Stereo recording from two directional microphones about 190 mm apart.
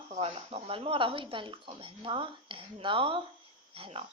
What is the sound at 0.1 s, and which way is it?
Speech, 35° right (ahead or behind).